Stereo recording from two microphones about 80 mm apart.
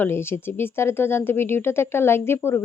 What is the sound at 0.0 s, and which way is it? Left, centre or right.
Speech, left.